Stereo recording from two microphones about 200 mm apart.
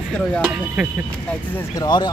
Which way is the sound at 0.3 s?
5° right (ahead or behind).